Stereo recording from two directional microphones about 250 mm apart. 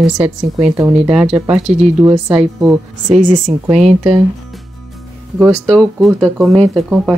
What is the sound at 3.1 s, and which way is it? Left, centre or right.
Speech, right.